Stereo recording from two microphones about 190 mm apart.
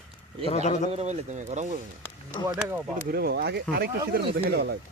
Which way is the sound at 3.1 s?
55° right (ahead or behind).